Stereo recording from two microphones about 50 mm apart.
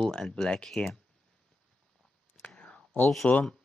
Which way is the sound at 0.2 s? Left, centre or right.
Centre.